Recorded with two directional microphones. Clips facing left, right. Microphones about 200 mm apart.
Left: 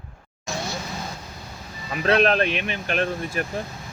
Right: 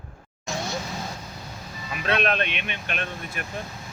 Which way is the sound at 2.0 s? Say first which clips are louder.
Left 6 dB; 35° left (ahead or behind).